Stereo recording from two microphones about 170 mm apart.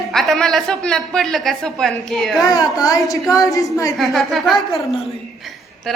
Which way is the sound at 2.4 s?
20° left (ahead or behind).